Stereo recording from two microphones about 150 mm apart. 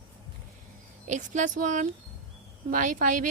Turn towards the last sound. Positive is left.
turn(degrees=-60)  # may be behind; listen again after turning